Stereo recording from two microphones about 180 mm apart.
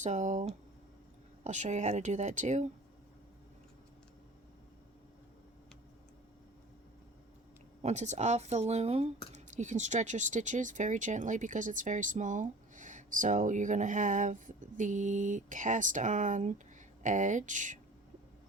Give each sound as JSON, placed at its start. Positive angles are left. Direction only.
{"t": 0.0, "sound": "speech", "side_deg": -40}
{"t": 1.5, "sound": "speech", "side_deg": -40}
{"t": 7.8, "sound": "speech", "side_deg": -40}